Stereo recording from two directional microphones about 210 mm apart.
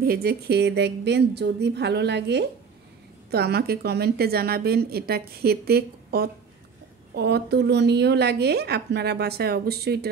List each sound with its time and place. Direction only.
0.0 s speech: 45° right (ahead or behind)